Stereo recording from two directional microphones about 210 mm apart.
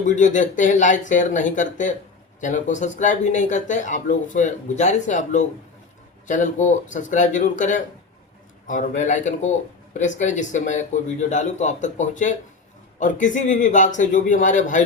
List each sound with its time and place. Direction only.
0.0 s speech: 35° left (ahead or behind)